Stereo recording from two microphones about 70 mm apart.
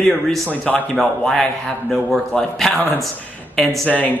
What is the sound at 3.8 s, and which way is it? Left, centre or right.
Speech, left.